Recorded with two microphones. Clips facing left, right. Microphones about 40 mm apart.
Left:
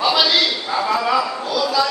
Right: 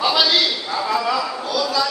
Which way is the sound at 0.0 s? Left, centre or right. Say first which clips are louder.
Left 1 dB; centre.